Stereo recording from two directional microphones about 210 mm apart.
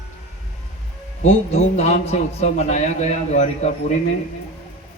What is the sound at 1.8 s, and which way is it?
A man's voice, 30° left (ahead or behind).